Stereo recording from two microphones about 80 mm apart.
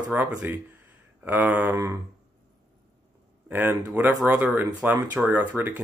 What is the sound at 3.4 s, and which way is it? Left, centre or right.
Speech, right.